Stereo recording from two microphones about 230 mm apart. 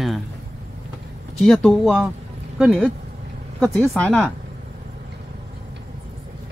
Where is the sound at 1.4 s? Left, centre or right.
Centre.